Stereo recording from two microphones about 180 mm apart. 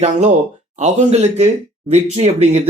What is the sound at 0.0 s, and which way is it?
Speech, 40° right (ahead or behind).